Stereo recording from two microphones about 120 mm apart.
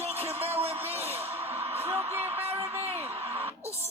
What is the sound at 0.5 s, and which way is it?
Speech, 55° right (ahead or behind).